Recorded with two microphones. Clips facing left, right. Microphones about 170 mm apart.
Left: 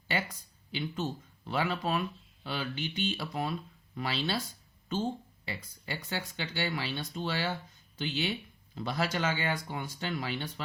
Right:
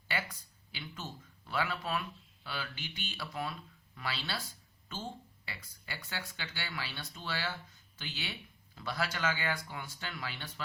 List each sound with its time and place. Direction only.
0.1 s speech: 20° left (ahead or behind)
5.5 s speech: 20° left (ahead or behind)